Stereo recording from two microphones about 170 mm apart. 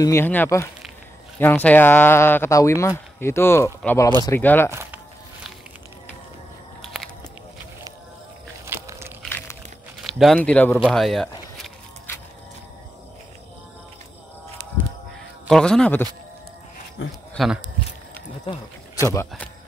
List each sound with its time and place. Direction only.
0.0 s speech: 15° left (ahead or behind)
4.6 s a sound: 15° right (ahead or behind)
6.8 s walk: centre (ahead or behind)
8.6 s biting: 15° right (ahead or behind)
10.0 s speech: centre (ahead or behind)
15.4 s speech: centre (ahead or behind)
17.3 s a sound: centre (ahead or behind)
19.1 s speech: 10° left (ahead or behind)